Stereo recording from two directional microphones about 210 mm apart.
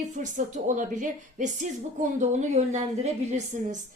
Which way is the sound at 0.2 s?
35° right (ahead or behind).